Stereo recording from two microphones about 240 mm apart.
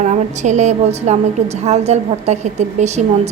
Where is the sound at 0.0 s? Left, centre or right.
Right.